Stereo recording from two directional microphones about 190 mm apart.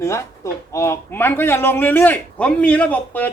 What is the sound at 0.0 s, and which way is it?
Speech, 15° left (ahead or behind).